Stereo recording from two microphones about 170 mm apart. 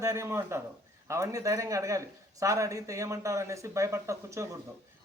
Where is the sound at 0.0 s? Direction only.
15° right (ahead or behind).